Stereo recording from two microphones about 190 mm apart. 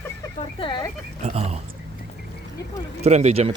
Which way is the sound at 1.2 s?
35° right (ahead or behind).